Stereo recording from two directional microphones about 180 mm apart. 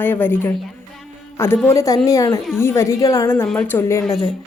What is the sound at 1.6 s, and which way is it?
A woman's voice, 15° left (ahead or behind).